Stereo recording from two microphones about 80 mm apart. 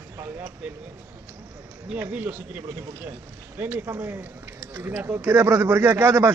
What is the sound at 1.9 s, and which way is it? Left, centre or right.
A man's voice, right.